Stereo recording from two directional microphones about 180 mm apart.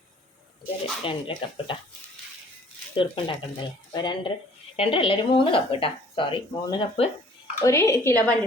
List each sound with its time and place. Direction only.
1.0 s speech: 30° left (ahead or behind)
2.9 s speech: 25° left (ahead or behind)
7.6 s a woman's voice: 15° left (ahead or behind)